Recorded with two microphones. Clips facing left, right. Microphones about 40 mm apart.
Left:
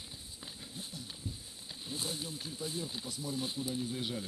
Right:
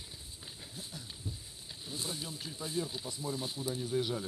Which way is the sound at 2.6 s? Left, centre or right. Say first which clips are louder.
Right 4 dB; right.